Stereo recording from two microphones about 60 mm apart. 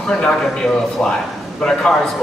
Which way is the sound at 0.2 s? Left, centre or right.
Centre.